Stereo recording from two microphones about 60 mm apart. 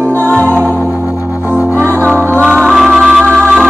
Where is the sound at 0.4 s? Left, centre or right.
Right.